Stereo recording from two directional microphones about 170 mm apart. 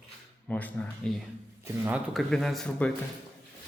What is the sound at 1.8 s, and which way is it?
Speech, 5° right (ahead or behind).